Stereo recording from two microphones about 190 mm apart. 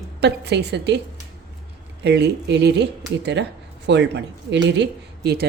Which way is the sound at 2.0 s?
60° right (ahead or behind).